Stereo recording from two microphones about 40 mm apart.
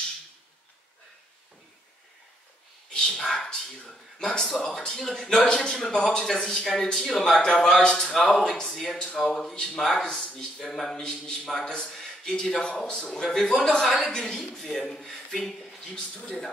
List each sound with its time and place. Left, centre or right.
2.9 s a man's voice: centre
10.0 s speech: left
10.6 s a man's voice: centre